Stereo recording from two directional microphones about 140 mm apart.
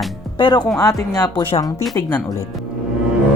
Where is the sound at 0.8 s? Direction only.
25° left (ahead or behind).